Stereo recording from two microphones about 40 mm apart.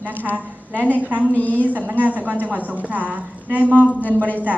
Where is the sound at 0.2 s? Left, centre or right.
Left.